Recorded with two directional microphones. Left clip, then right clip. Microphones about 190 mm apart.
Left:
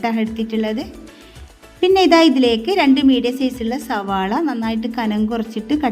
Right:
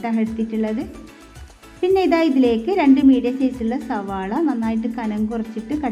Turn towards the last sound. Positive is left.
turn(degrees=50)  # may be behind; listen again after turning